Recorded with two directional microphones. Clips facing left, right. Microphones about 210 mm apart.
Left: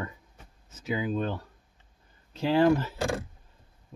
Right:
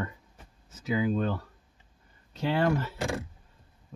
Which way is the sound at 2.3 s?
30° left (ahead or behind).